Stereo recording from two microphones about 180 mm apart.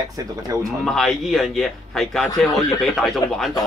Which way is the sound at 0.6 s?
Centre (ahead or behind).